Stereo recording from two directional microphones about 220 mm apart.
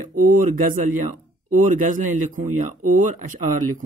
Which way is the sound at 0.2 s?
40° right (ahead or behind).